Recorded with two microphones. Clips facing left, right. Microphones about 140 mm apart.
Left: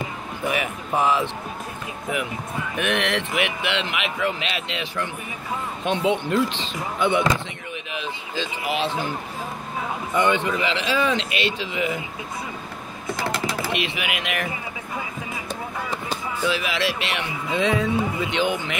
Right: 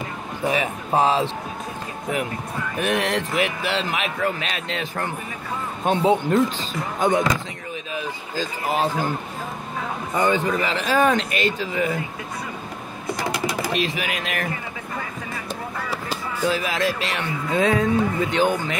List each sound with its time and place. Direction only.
0.5 s speech: 30° right (ahead or behind)
2.8 s speech: 35° right (ahead or behind)
10.1 s speech: 40° right (ahead or behind)
13.1 s typing: 15° right (ahead or behind)
13.7 s speech: 40° right (ahead or behind)
15.9 s a sound: 5° right (ahead or behind)
16.4 s speech: 45° right (ahead or behind)